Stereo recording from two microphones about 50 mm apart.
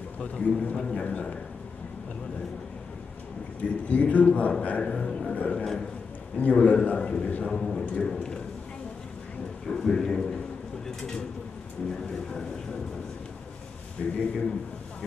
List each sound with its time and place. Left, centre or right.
0.2 s a man's voice: left
0.7 s a man's voice: centre
3.6 s a man's voice: left
4.8 s a man's voice: centre
5.3 s a man's voice: left
7.4 s a man's voice: centre
9.7 s a man's voice: centre
14.0 s a man's voice: centre